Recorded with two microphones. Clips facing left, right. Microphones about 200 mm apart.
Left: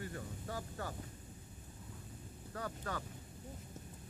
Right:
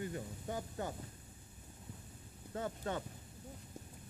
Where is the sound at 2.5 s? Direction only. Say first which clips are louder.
Right 3 dB; 25° right (ahead or behind).